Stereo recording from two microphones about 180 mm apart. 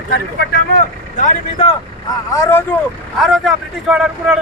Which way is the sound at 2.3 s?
15° left (ahead or behind).